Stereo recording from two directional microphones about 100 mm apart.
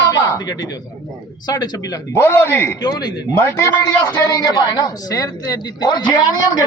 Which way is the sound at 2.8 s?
45° left (ahead or behind).